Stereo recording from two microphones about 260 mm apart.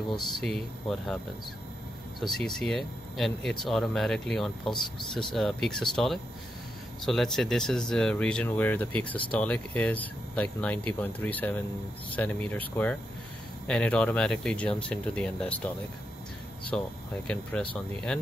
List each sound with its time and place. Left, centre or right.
0.1 s speech: centre
2.3 s speech: centre
16.7 s speech: centre